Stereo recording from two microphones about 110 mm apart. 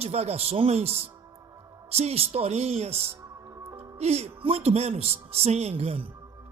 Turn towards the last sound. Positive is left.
turn(degrees=-60)  # may be behind; listen again after turning